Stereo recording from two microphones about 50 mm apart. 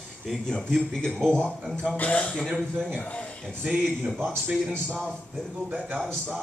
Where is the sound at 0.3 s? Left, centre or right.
Centre.